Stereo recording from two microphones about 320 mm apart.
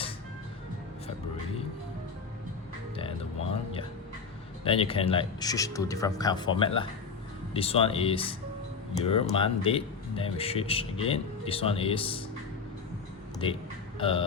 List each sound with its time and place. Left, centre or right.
2.9 s speech: centre
4.6 s speech: centre
14.0 s speech: centre